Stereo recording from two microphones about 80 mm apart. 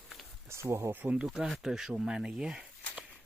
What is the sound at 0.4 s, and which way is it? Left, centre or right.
Speech, right.